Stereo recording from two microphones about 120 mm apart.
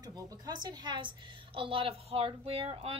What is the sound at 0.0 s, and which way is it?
A woman's voice, 30° right (ahead or behind).